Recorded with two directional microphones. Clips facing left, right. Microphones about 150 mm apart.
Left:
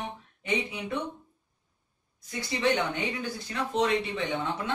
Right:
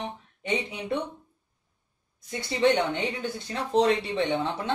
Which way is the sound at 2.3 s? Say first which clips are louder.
Right 4 dB; 25° right (ahead or behind).